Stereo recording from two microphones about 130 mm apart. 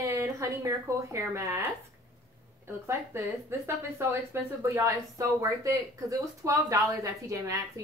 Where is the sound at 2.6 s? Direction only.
20° right (ahead or behind).